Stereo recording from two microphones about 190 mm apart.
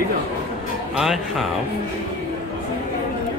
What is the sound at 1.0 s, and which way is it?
Speech, centre (ahead or behind).